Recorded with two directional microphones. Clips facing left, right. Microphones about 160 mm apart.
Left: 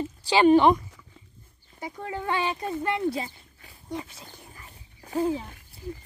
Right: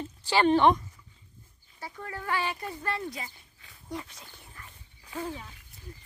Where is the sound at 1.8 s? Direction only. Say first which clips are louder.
Left 6 dB; 20° left (ahead or behind).